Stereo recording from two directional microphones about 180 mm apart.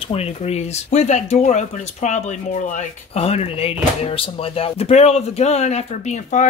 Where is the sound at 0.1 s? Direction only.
35° left (ahead or behind).